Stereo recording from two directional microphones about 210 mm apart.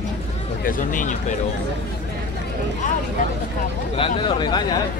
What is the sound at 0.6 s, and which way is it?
Speech, 40° left (ahead or behind).